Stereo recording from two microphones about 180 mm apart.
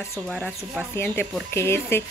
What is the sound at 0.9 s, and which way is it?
Speech, 10° left (ahead or behind).